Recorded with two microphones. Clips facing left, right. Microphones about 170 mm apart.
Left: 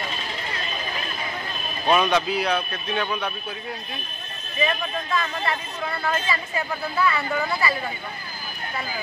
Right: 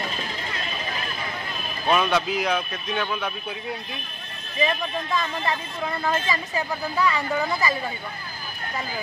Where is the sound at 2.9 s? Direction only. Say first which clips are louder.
Left 1 dB; 5° left (ahead or behind).